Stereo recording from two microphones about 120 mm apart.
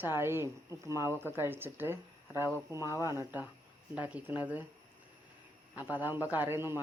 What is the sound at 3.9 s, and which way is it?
Speech, 10° right (ahead or behind).